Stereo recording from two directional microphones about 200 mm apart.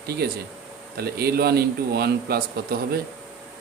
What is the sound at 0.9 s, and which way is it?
Speech, 50° right (ahead or behind).